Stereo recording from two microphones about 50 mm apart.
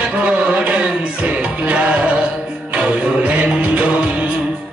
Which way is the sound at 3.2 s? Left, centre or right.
Right.